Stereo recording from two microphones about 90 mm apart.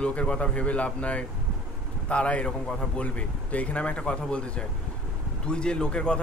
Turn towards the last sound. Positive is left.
turn(degrees=10)  # may be behind; listen again after turning